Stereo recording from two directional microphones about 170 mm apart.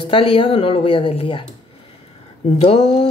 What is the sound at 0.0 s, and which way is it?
Speech, 30° left (ahead or behind).